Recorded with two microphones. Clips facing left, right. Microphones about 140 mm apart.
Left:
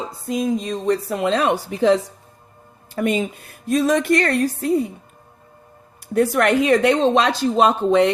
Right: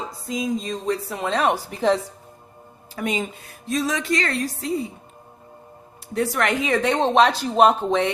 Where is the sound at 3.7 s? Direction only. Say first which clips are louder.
Left 6 dB; 55° left (ahead or behind).